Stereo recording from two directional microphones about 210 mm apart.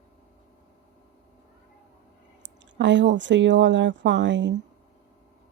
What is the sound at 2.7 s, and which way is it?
Speech, 60° right (ahead or behind).